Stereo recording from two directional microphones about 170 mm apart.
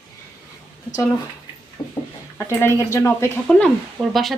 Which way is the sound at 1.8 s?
25° left (ahead or behind).